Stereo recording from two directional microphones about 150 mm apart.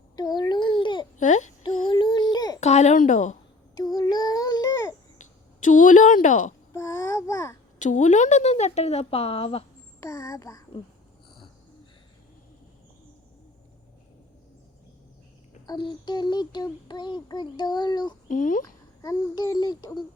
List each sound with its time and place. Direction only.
0.2 s babbling: 25° left (ahead or behind)
1.2 s a sound: 55° left (ahead or behind)
1.9 s child singing: 30° left (ahead or behind)
2.6 s speech: 50° left (ahead or behind)
3.9 s child singing: 25° left (ahead or behind)
5.6 s a sound: 60° left (ahead or behind)
6.7 s babbling: 20° left (ahead or behind)
7.8 s a woman's voice: 55° left (ahead or behind); by 9.6 s 40° left (ahead or behind)
10.0 s music: 20° left (ahead or behind)
15.6 s child singing: 30° left (ahead or behind)
18.3 s speech: 60° left (ahead or behind)
18.6 s a child's voice: 20° left (ahead or behind)